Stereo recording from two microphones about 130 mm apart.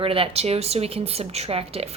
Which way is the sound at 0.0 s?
45° right (ahead or behind).